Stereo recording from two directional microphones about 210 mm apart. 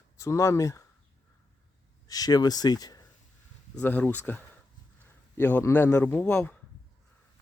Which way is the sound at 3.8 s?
10° left (ahead or behind).